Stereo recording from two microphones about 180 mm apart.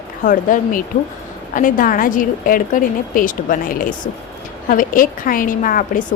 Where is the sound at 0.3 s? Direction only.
50° left (ahead or behind).